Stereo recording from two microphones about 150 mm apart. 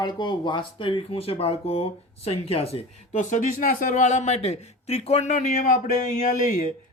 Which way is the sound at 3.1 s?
60° left (ahead or behind).